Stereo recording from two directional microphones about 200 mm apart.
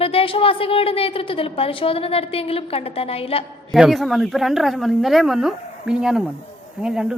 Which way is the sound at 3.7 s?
Centre (ahead or behind).